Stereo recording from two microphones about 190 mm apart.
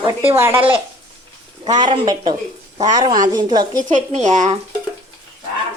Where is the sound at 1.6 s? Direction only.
25° right (ahead or behind).